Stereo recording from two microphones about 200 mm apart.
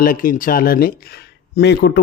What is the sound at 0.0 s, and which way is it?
Speech, 45° left (ahead or behind).